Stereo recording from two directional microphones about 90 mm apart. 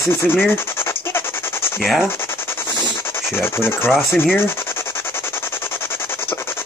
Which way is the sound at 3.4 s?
25° left (ahead or behind).